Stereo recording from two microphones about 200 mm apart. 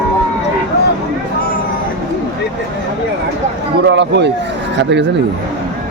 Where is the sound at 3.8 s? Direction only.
60° right (ahead or behind).